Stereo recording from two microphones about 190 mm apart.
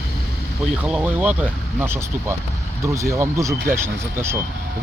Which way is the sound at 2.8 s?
15° right (ahead or behind).